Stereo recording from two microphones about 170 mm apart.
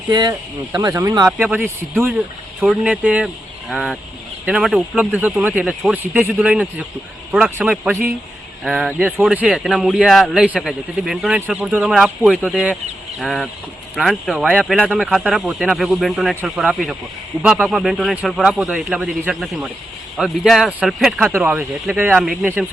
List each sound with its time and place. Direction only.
0.1 s speech: 25° right (ahead or behind)
1.3 s speech: centre (ahead or behind)
1.5 s speech: 10° right (ahead or behind)